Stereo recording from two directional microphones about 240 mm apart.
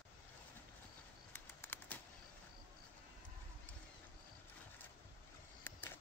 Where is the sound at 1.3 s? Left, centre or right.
Centre.